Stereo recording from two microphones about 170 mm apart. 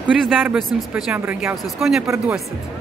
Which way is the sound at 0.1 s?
10° right (ahead or behind).